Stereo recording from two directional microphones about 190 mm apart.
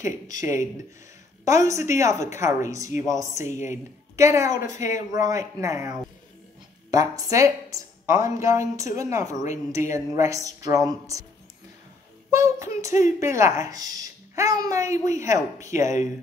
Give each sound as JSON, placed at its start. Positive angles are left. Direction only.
{"t": 0.0, "sound": "a woman's voice", "side_deg": -15}
{"t": 12.3, "sound": "a woman's voice", "side_deg": -15}